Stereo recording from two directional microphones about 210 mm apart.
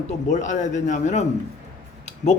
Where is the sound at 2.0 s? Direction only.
35° left (ahead or behind).